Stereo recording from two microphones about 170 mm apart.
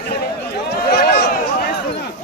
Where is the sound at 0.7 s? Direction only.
70° left (ahead or behind).